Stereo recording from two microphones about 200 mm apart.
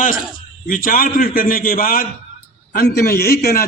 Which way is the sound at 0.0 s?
45° left (ahead or behind).